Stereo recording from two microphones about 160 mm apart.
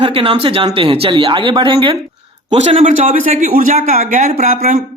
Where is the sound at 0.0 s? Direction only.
35° right (ahead or behind).